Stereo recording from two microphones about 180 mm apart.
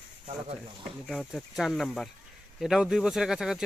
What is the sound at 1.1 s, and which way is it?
Speech, centre (ahead or behind).